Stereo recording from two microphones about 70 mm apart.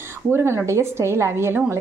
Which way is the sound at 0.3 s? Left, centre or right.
Right.